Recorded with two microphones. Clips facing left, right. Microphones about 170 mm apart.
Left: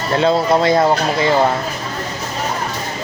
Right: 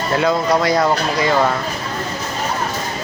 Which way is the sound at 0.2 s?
25° left (ahead or behind).